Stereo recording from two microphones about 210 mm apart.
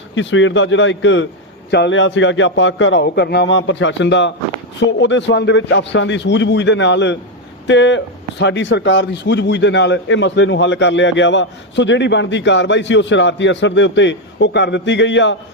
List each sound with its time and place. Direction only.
0.1 s speech: 65° left (ahead or behind)